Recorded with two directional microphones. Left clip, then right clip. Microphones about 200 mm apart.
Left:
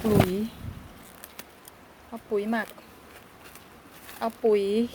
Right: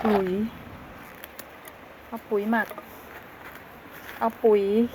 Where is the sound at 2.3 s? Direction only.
10° left (ahead or behind).